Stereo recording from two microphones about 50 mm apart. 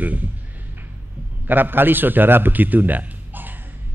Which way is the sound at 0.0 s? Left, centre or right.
Right.